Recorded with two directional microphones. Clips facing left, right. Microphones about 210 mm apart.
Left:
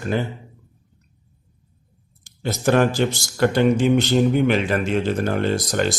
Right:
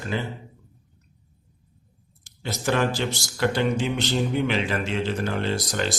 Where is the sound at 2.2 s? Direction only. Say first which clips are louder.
Left 6 dB; 50° left (ahead or behind).